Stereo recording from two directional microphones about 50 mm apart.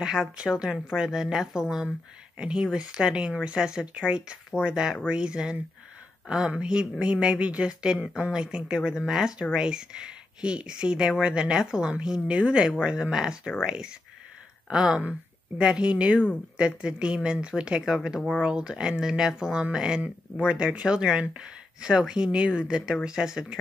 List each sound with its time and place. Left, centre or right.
0.0 s speech: centre